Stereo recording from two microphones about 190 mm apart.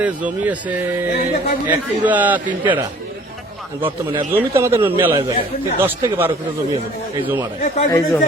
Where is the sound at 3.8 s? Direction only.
25° right (ahead or behind).